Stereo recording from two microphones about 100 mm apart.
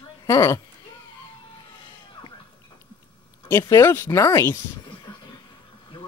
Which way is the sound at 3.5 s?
30° left (ahead or behind).